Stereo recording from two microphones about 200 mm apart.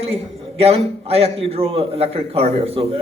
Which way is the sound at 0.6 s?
30° right (ahead or behind).